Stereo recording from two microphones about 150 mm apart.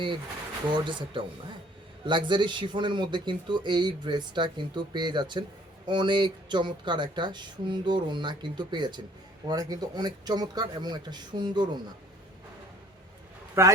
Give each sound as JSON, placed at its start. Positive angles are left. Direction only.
{"t": 0.7, "sound": "a man's voice", "side_deg": -30}
{"t": 13.6, "sound": "speech", "side_deg": -15}